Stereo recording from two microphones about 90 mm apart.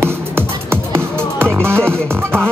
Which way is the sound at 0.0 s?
25° right (ahead or behind).